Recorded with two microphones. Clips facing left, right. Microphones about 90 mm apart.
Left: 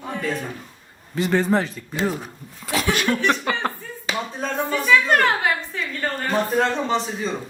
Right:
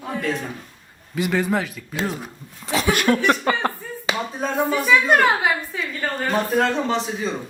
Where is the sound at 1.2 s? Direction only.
15° right (ahead or behind).